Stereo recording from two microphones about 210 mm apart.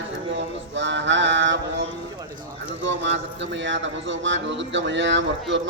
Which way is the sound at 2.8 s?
60° right (ahead or behind).